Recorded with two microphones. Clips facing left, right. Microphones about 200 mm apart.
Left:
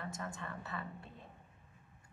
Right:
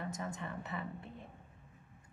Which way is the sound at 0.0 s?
15° right (ahead or behind).